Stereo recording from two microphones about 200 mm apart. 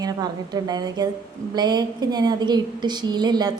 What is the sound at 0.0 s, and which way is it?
A woman's voice, 20° right (ahead or behind).